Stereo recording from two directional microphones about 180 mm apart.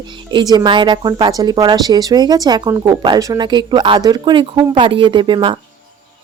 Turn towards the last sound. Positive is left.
turn(degrees=-25)  # may be behind; listen again after turning